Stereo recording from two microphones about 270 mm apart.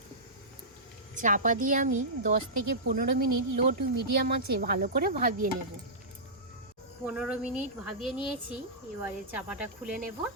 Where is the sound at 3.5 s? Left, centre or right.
Right.